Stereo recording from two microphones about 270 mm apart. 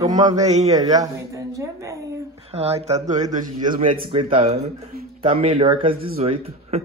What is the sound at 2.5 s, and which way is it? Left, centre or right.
A man's voice, right.